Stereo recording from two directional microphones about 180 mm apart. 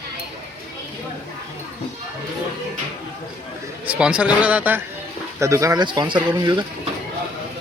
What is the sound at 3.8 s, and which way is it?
Speech, 5° right (ahead or behind).